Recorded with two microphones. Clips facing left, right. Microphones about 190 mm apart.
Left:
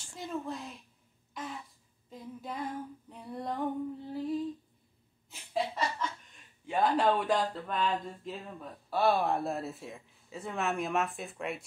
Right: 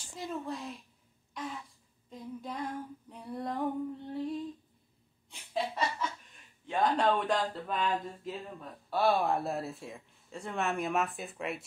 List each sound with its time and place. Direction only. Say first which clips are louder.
0.1 s speech: even; centre (ahead or behind)
1.4 s a sound: right 1 dB; centre (ahead or behind)
2.0 s speech: right 1 dB; 5° left (ahead or behind)
5.3 s chuckle: left 1 dB; centre (ahead or behind)
6.7 s speech: left 1 dB; 5° left (ahead or behind)